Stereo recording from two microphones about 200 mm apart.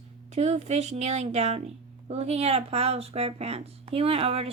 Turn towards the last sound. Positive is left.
turn(degrees=-30)  # may be behind; listen again after turning